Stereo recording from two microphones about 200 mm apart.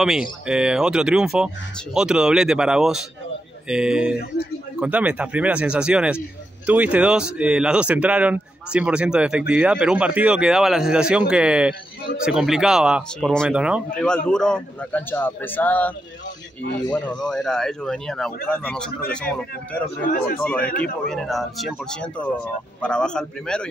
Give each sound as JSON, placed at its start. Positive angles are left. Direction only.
{"t": 0.0, "sound": "a man's voice", "side_deg": 0}
{"t": 16.9, "sound": "speech", "side_deg": 5}
{"t": 20.1, "sound": "speech", "side_deg": 45}
{"t": 20.4, "sound": "a man's voice", "side_deg": 5}